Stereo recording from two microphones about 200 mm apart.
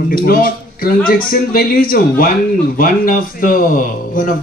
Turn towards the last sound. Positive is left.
turn(degrees=45)  # may be behind; listen again after turning